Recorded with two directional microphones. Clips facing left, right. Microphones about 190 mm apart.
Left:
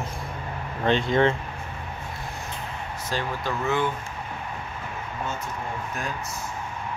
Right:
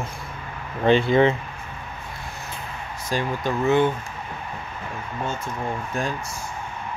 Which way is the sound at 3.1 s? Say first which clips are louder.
Right 4 dB; 20° right (ahead or behind).